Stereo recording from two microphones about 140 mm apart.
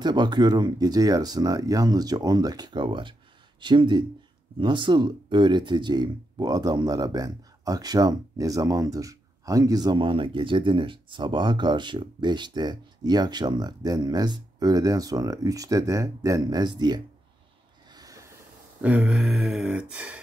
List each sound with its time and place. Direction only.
0.0 s speech: 30° right (ahead or behind)
17.9 s a sound: 25° right (ahead or behind)
18.8 s speech: 10° right (ahead or behind)